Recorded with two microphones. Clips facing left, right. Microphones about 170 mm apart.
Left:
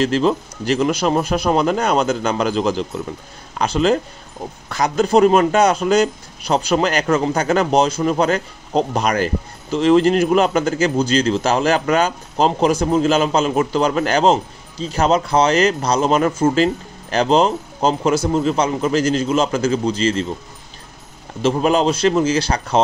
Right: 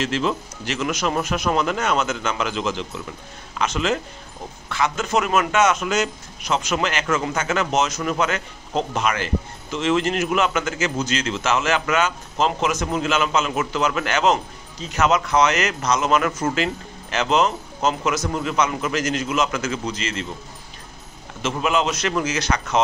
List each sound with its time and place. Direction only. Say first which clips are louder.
0.0 s a man's voice: left 6 dB; 35° left (ahead or behind)
21.4 s a man's voice: left 6 dB; 35° left (ahead or behind)